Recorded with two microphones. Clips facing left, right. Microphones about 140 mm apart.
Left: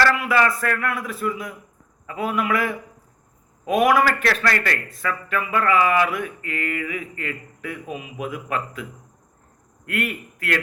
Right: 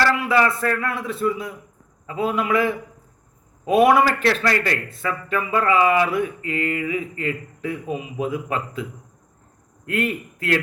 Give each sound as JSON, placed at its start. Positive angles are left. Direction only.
{"t": 0.0, "sound": "a man's voice", "side_deg": -25}